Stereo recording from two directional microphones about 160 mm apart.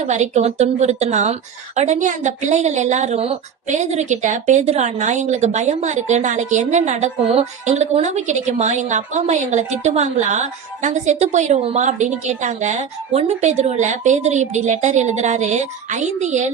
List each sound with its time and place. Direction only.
0.0 s a woman's voice: 45° right (ahead or behind)